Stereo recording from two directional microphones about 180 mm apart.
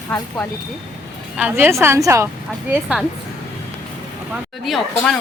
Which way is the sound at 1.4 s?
10° right (ahead or behind).